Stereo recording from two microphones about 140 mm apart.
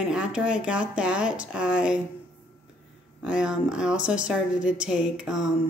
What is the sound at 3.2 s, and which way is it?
A woman's voice, 5° right (ahead or behind).